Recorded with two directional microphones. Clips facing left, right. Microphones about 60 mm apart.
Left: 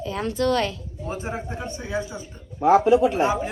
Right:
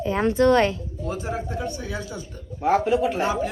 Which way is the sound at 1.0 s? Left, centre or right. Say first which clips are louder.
Right 1 dB; left.